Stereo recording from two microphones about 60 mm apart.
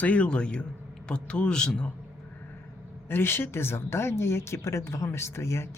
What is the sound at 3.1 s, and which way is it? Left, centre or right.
Speech, left.